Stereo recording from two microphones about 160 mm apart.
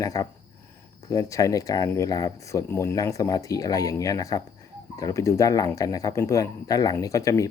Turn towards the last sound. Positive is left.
turn(degrees=20)  # may be behind; listen again after turning